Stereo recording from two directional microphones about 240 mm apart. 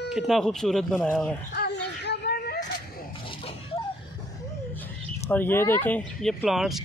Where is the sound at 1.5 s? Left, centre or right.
Left.